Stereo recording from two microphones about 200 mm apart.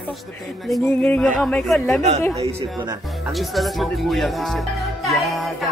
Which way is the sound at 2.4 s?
25° right (ahead or behind).